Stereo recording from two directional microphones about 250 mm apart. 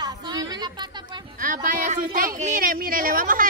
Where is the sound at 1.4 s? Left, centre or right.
Right.